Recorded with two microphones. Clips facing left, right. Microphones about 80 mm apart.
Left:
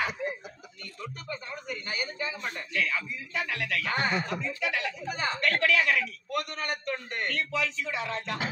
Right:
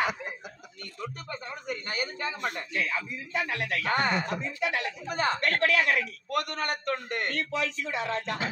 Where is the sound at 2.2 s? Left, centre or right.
Right.